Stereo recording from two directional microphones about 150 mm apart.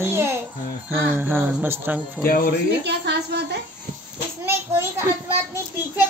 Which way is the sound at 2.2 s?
75° left (ahead or behind).